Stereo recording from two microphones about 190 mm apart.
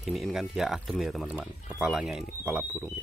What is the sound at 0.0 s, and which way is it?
Speech, centre (ahead or behind).